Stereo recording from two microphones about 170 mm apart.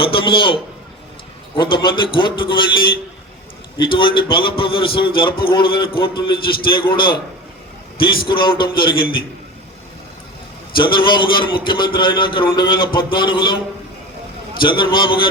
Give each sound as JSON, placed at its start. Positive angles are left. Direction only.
{"t": 0.0, "sound": "a man's voice", "side_deg": 30}
{"t": 3.8, "sound": "a man's voice", "side_deg": 30}
{"t": 10.8, "sound": "a man's voice", "side_deg": 30}
{"t": 14.6, "sound": "a man's voice", "side_deg": 30}